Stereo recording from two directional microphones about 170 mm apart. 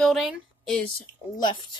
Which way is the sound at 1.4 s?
25° left (ahead or behind).